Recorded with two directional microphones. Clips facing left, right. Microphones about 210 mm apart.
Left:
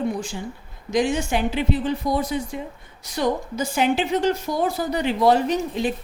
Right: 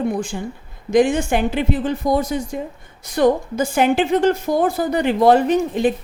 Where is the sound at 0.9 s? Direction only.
55° right (ahead or behind).